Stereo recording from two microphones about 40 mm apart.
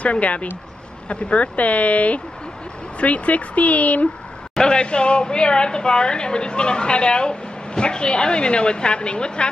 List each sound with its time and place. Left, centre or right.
0.0 s speech: left
4.6 s a woman's voice: left